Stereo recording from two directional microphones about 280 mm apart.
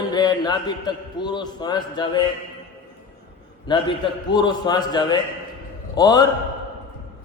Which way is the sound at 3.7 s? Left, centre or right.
Centre.